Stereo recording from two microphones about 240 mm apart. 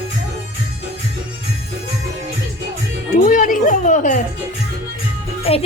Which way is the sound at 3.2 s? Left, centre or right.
Left.